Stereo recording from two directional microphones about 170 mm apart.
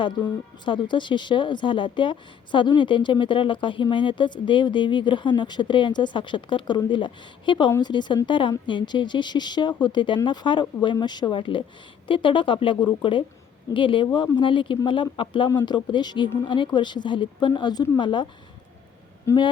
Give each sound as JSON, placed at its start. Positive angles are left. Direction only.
{"t": 0.0, "sound": "speech", "side_deg": 25}
{"t": 19.3, "sound": "speech", "side_deg": 15}